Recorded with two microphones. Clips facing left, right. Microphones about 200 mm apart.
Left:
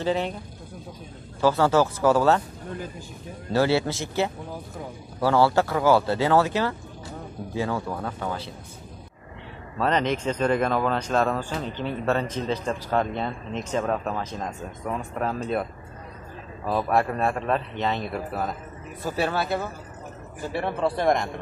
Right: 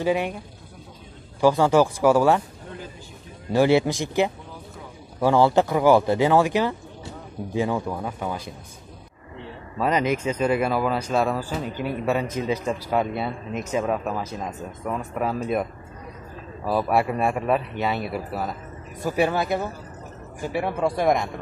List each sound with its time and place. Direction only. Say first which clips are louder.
0.0 s speech: right 2 dB; 10° right (ahead or behind)
1.4 s speech: right 2 dB; 15° right (ahead or behind)
3.5 s speech: right 4 dB; 15° right (ahead or behind)
9.8 s speech: right 1 dB; 10° right (ahead or behind)
16.6 s speech: right 1 dB; 5° right (ahead or behind)
19.0 s speech: right 3 dB; 15° right (ahead or behind)